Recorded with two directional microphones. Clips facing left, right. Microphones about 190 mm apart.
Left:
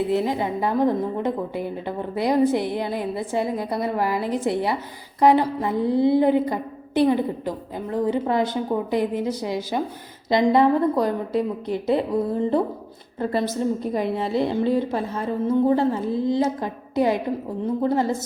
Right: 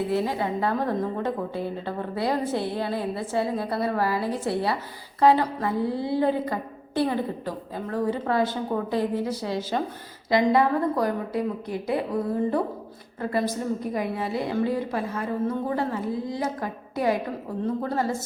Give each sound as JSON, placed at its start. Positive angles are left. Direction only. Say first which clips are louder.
{"t": 0.1, "sound": "a woman's voice", "louder": "left 3 dB", "side_deg": 20}
{"t": 10.2, "sound": "a woman's voice", "louder": "left 3 dB", "side_deg": 20}
{"t": 13.1, "sound": "a woman's voice", "louder": "left 3 dB", "side_deg": 25}